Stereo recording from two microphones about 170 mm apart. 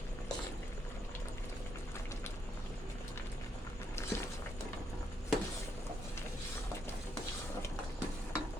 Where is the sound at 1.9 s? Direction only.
15° left (ahead or behind).